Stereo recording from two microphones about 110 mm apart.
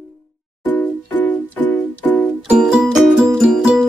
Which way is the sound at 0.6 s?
15° left (ahead or behind).